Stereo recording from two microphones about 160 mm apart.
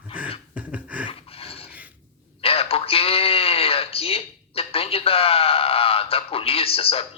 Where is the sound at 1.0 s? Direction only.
35° left (ahead or behind).